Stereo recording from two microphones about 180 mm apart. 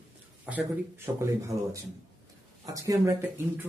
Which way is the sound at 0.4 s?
10° right (ahead or behind).